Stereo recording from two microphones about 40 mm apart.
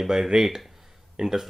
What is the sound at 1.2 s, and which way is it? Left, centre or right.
Speech, centre.